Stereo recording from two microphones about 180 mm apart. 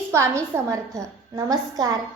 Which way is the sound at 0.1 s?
15° right (ahead or behind).